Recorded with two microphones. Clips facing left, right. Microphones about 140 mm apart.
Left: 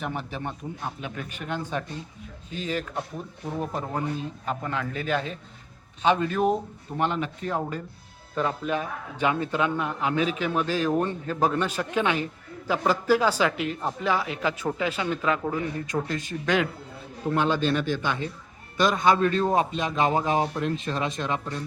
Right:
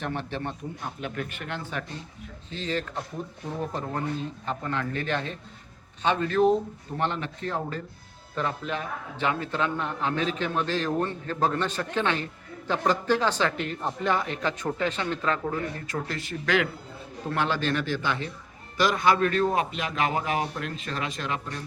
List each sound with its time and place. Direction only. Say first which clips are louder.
0.0 s a man's voice: even; 10° left (ahead or behind)